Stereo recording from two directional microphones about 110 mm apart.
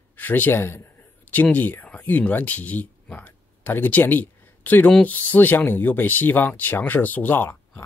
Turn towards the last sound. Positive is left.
turn(degrees=20)  # may be behind; listen again after turning